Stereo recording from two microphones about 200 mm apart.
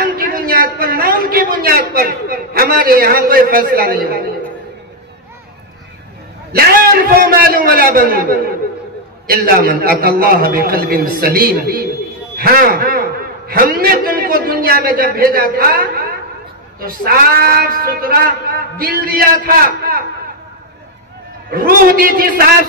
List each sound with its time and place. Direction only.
0.0 s a sound: 45° right (ahead or behind)
6.5 s a man's voice: 50° right (ahead or behind)
21.5 s a man's voice: 50° right (ahead or behind)